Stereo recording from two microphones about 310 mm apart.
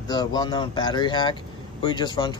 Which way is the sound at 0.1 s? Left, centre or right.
Centre.